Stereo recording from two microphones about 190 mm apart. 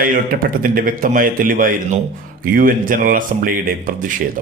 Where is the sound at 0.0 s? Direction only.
45° right (ahead or behind).